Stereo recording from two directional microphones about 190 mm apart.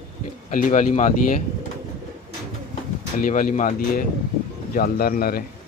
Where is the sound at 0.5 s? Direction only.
45° left (ahead or behind).